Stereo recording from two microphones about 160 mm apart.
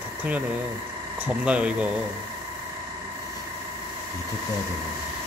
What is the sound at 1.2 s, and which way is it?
Speech, 5° right (ahead or behind).